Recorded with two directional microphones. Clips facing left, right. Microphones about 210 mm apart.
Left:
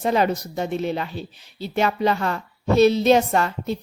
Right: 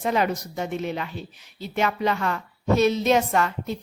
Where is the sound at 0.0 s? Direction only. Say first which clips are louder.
Left 3 dB; 35° left (ahead or behind).